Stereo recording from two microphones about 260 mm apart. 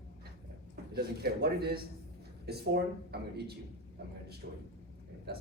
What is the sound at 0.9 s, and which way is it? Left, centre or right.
Speech, right.